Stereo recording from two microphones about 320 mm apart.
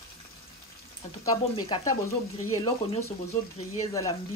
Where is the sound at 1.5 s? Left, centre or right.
Centre.